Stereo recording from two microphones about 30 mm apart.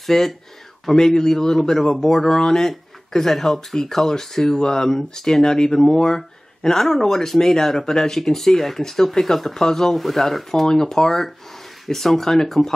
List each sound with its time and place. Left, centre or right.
0.0 s speech: centre
9.9 s speech: centre
10.7 s speech: centre